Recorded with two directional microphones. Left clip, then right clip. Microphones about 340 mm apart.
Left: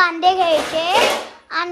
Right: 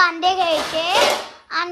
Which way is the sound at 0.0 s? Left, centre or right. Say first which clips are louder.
Left 2 dB; centre.